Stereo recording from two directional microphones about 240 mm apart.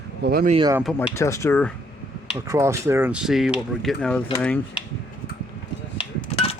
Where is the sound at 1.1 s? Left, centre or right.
Centre.